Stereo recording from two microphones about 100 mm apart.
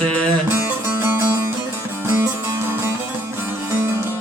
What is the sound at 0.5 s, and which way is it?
Music, 20° right (ahead or behind).